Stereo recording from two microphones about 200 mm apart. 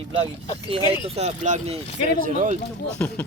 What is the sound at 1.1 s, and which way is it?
Speech, 35° right (ahead or behind).